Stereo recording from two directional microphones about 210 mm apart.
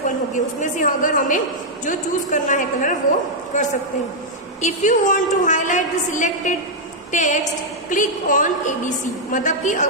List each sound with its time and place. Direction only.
0.3 s a woman's voice: 35° left (ahead or behind)